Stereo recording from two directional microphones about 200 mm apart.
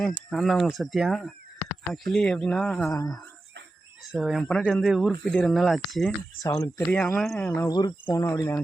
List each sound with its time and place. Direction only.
0.3 s speech: centre (ahead or behind)
4.0 s speech: centre (ahead or behind)
6.4 s speech: 15° left (ahead or behind)
6.8 s speech: 5° left (ahead or behind)
7.7 s speech: 20° left (ahead or behind)